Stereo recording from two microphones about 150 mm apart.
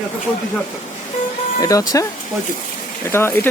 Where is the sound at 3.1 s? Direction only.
15° left (ahead or behind).